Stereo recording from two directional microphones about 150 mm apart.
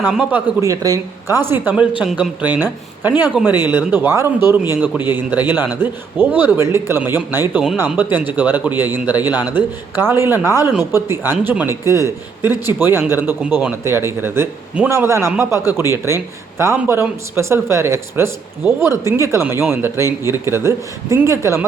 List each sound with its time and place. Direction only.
0.0 s a man's voice: 10° right (ahead or behind)
0.7 s a man's voice: 25° right (ahead or behind)
3.4 s speech: centre (ahead or behind)
3.7 s a man's voice: 15° right (ahead or behind)